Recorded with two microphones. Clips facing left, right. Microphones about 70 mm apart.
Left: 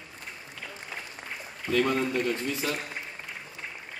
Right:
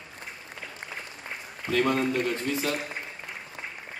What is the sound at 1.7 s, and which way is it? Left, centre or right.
A man's voice, right.